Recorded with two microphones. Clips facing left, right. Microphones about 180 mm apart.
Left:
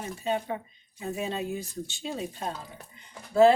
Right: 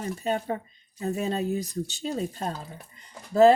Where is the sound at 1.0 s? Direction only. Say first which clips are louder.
Right 4 dB; 40° right (ahead or behind).